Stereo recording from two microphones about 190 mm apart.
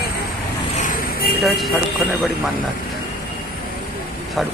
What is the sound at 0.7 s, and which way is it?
Vehicle, 45° left (ahead or behind).